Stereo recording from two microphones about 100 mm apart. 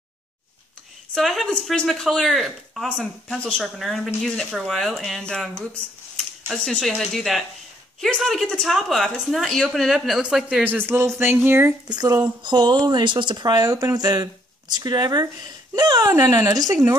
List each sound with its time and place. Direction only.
1.1 s speech: centre (ahead or behind); by 11.7 s 25° right (ahead or behind)
11.9 s speech: 40° right (ahead or behind)